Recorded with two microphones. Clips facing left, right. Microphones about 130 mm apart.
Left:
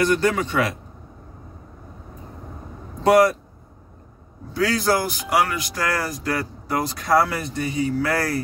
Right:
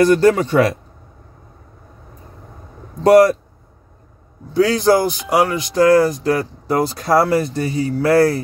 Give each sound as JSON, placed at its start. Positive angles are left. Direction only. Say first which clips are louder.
{"t": 0.0, "sound": "a man's voice", "louder": "right 7 dB", "side_deg": -35}
{"t": 4.6, "sound": "speech", "louder": "right 7 dB", "side_deg": -25}